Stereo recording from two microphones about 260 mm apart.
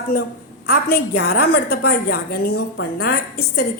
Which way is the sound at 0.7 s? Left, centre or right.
Left.